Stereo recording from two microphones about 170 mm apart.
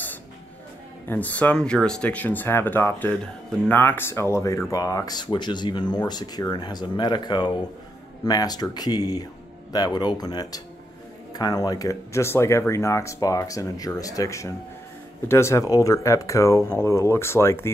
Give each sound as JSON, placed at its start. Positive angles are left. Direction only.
{"t": 1.0, "sound": "speech", "side_deg": 10}